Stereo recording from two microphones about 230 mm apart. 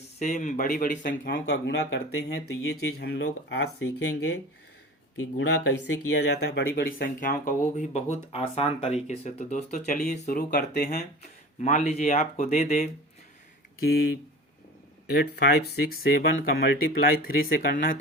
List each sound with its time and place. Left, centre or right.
0.2 s speech: left
10.8 s speech: left
15.1 s speech: left